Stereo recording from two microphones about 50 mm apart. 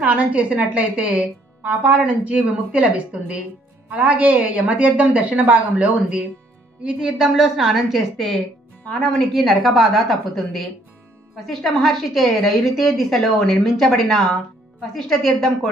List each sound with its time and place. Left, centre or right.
0.0 s a woman's voice: right; by 15.7 s centre